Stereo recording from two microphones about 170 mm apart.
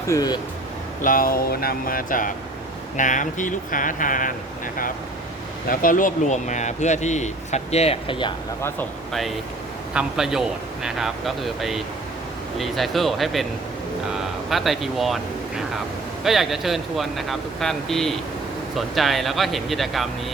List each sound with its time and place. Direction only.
0.1 s speech: 20° left (ahead or behind)
1.0 s speech: 55° left (ahead or behind)
5.6 s speech: 55° left (ahead or behind); by 8.3 s 30° left (ahead or behind)
9.9 s speech: 5° right (ahead or behind)